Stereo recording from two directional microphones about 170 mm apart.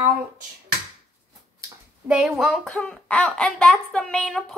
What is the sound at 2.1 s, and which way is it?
Speech, 5° right (ahead or behind).